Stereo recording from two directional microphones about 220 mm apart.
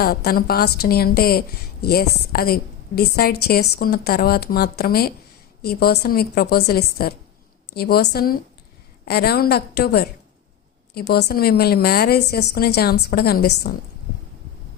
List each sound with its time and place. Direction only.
0.0 s a woman's voice: 45° left (ahead or behind)